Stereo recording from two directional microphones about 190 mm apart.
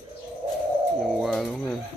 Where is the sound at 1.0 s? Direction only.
Centre (ahead or behind).